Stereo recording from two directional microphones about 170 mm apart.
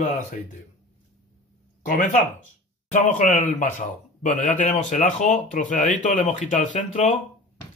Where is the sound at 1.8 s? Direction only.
55° left (ahead or behind).